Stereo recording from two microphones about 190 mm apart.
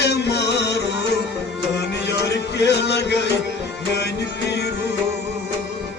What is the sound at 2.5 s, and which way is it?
Music, 65° left (ahead or behind).